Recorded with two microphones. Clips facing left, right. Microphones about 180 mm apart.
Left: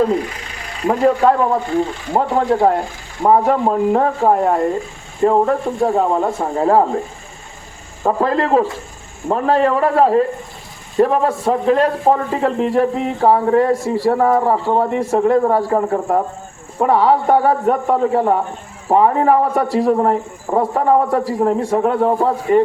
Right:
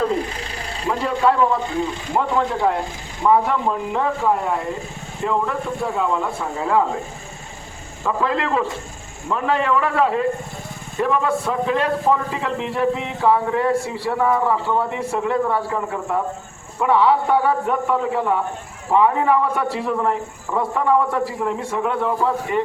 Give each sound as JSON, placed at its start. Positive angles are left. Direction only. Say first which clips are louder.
{"t": 1.0, "sound": "a man's voice", "louder": "left 4 dB", "side_deg": 45}
{"t": 8.0, "sound": "a man's voice", "louder": "left 5 dB", "side_deg": 40}